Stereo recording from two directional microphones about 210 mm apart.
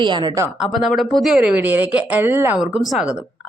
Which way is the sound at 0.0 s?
20° right (ahead or behind).